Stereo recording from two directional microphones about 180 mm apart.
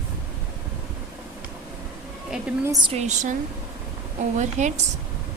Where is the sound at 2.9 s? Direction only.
40° right (ahead or behind).